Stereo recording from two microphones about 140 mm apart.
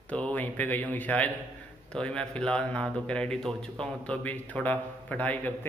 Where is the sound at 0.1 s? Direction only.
10° left (ahead or behind).